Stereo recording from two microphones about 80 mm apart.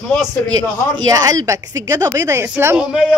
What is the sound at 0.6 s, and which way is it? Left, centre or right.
Speech, right.